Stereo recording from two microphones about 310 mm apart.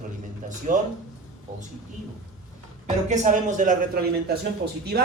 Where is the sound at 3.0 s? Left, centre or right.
Right.